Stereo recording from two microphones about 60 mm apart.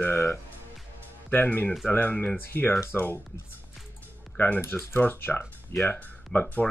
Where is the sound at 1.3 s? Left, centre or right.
Left.